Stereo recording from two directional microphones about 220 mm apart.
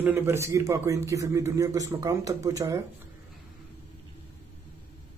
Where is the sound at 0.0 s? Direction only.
10° right (ahead or behind).